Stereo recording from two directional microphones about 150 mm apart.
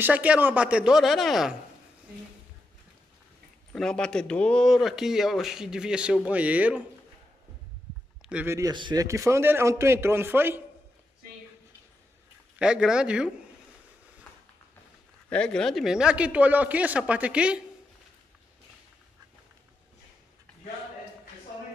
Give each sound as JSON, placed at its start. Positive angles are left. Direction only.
{"t": 0.0, "sound": "speech", "side_deg": -10}
{"t": 3.7, "sound": "speech", "side_deg": 5}
{"t": 8.2, "sound": "speech", "side_deg": -10}
{"t": 8.5, "sound": "a man's voice", "side_deg": -25}
{"t": 12.5, "sound": "speech", "side_deg": -5}
{"t": 15.2, "sound": "speech", "side_deg": 5}